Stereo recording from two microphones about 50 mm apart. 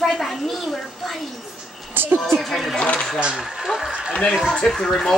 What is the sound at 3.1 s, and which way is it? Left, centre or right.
Speech, centre.